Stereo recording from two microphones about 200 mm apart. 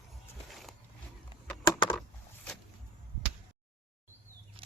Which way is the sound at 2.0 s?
5° left (ahead or behind).